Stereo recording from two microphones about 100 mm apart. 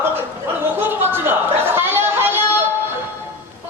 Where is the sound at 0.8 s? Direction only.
20° right (ahead or behind).